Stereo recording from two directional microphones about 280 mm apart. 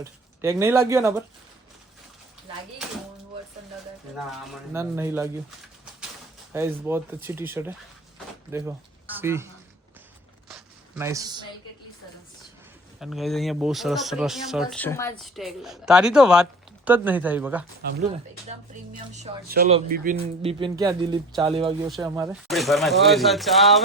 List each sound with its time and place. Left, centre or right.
0.0 s speech: centre
4.7 s speech: centre
6.5 s speech: centre
10.5 s a sound: centre
13.0 s speech: centre
15.4 s speech: centre
18.9 s speech: right
21.8 s speech: centre